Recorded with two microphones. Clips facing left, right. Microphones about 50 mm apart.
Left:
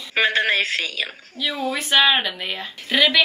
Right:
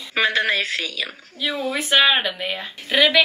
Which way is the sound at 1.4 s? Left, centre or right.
Right.